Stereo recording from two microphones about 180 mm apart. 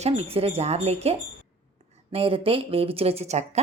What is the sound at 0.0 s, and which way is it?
Speech, 35° right (ahead or behind).